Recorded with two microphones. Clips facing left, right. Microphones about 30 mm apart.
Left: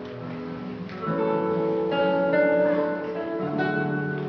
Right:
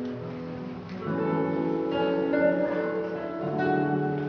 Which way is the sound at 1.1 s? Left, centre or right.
Left.